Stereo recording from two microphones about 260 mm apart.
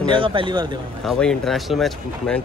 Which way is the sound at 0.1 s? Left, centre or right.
Centre.